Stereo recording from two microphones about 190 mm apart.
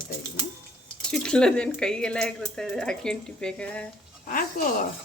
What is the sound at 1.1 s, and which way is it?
Speech, 5° left (ahead or behind).